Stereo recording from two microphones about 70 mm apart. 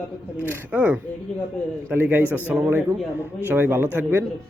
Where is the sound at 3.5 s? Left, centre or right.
Right.